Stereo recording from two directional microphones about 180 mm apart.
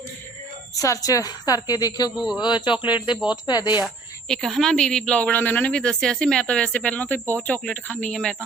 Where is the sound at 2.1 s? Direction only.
5° right (ahead or behind).